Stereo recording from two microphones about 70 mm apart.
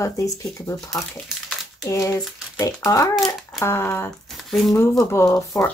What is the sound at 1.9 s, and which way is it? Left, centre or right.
Speech, left.